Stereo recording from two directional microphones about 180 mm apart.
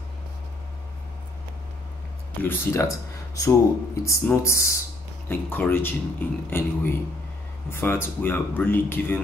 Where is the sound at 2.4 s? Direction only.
10° left (ahead or behind).